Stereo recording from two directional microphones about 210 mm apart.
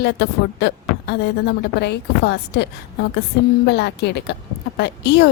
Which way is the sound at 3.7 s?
55° left (ahead or behind).